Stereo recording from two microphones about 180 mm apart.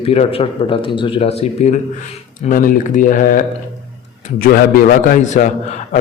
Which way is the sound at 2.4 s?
50° left (ahead or behind).